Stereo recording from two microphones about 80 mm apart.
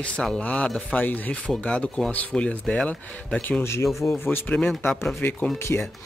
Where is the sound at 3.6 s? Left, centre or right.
Left.